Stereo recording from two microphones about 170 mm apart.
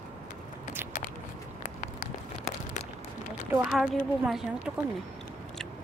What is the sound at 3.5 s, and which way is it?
Speech, 5° right (ahead or behind).